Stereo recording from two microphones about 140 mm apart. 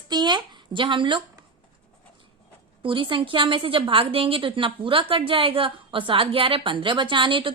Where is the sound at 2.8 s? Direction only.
35° right (ahead or behind).